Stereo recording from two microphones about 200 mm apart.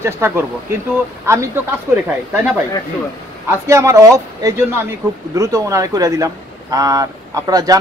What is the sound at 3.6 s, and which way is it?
Speech, 15° right (ahead or behind).